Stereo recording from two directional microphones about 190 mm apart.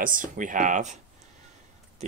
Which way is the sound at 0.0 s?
45° right (ahead or behind).